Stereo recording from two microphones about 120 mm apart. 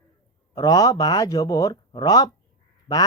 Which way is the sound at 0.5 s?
30° left (ahead or behind).